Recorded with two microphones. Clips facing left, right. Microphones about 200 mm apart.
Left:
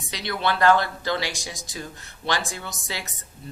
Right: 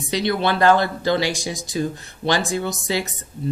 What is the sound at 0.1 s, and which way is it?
Speech, 25° right (ahead or behind).